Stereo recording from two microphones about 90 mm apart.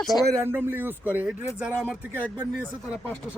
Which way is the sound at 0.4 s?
20° right (ahead or behind).